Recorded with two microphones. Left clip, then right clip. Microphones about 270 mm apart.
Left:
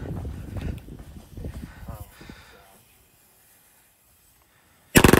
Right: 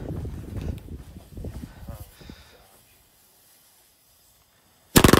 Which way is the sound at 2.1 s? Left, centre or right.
Centre.